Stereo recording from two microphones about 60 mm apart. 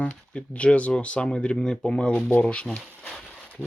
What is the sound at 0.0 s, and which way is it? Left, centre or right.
Speech, left.